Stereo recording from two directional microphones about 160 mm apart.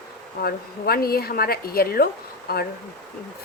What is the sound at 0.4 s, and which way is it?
Speech, 70° left (ahead or behind).